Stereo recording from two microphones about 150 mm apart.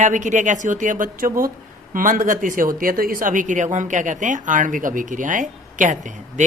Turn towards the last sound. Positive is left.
turn(degrees=-55)  # may be behind; listen again after turning